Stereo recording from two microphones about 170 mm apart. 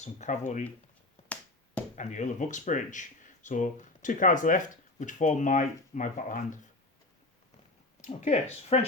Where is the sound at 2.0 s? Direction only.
45° left (ahead or behind).